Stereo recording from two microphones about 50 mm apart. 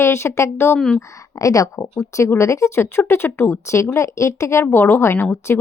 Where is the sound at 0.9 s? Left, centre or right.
Left.